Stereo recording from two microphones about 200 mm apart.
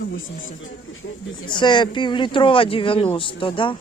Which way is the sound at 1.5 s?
25° left (ahead or behind).